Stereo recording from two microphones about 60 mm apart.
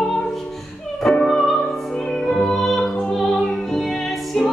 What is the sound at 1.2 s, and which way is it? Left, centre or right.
Music, centre.